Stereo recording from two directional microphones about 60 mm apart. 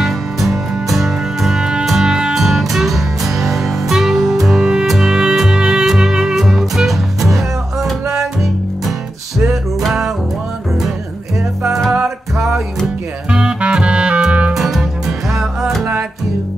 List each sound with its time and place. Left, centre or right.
0.0 s music: centre
9.4 s music: centre
12.4 s music: centre; by 14.5 s right
14.5 s music: centre